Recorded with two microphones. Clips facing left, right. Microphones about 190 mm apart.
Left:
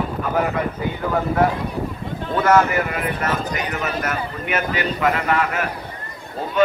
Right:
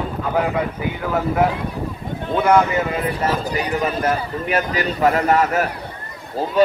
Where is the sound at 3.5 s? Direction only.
35° right (ahead or behind).